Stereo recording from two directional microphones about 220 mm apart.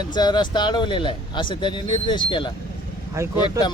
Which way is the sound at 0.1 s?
20° left (ahead or behind).